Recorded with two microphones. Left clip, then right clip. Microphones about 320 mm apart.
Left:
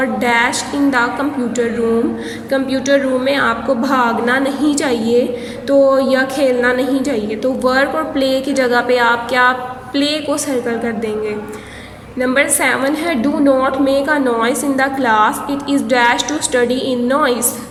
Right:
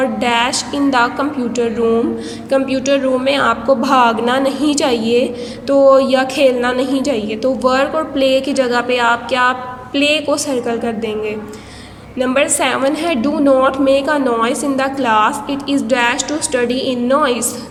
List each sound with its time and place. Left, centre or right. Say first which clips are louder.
0.0 s a woman's voice: left 1 dB; centre
12.2 s a woman's voice: even; centre